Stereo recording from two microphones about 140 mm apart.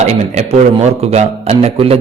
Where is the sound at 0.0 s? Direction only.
50° right (ahead or behind).